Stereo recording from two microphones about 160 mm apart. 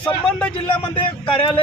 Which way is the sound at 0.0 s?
5° left (ahead or behind).